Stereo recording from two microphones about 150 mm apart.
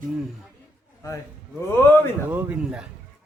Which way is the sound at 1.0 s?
20° left (ahead or behind).